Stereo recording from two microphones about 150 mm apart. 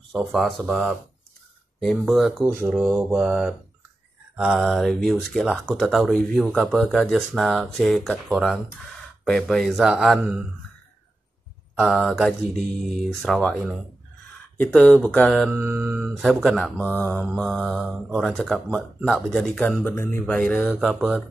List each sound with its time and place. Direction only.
0.1 s speech: centre (ahead or behind)
2.4 s a sound: 15° right (ahead or behind)
2.9 s speech: 5° right (ahead or behind)
11.7 s speech: centre (ahead or behind)
15.5 s a sound: 15° right (ahead or behind)
16.3 s speech: centre (ahead or behind)
17.5 s speech: centre (ahead or behind)